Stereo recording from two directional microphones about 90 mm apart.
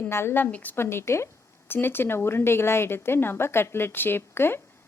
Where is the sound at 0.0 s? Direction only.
25° left (ahead or behind).